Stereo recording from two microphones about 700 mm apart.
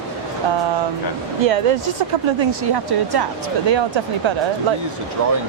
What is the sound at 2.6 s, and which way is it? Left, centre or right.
Speech, right.